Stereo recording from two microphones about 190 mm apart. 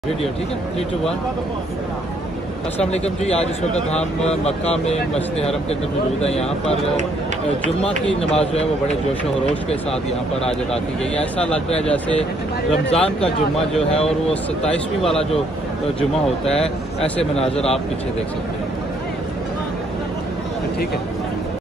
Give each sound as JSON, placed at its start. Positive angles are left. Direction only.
{"t": 2.8, "sound": "speech", "side_deg": 35}
{"t": 6.2, "sound": "speech", "side_deg": 35}
{"t": 8.2, "sound": "speech", "side_deg": 35}
{"t": 10.4, "sound": "speech", "side_deg": 35}
{"t": 11.3, "sound": "speech", "side_deg": 5}
{"t": 12.9, "sound": "speech", "side_deg": 5}
{"t": 16.0, "sound": "speech", "side_deg": 5}